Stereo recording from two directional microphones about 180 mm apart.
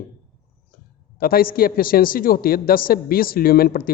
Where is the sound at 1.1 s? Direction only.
55° left (ahead or behind).